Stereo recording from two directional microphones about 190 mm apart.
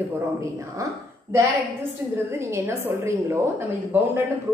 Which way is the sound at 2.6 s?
15° right (ahead or behind).